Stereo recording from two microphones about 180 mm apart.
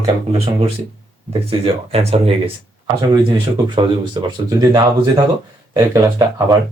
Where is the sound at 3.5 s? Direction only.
25° right (ahead or behind).